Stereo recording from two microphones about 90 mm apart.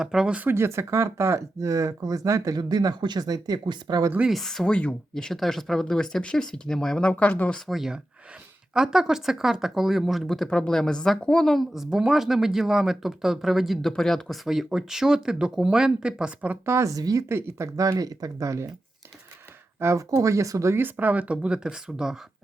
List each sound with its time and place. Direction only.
0.0 s speech: 5° right (ahead or behind)
0.3 s speech: 25° right (ahead or behind); by 4.0 s 50° right (ahead or behind)
4.3 s speech: centre (ahead or behind)
7.7 s speech: 5° right (ahead or behind)
16.6 s speech: 35° right (ahead or behind)
17.2 s speech: 30° right (ahead or behind)
17.7 s speech: 40° right (ahead or behind)
19.8 s speech: 35° right (ahead or behind)
20.9 s speech: 15° right (ahead or behind)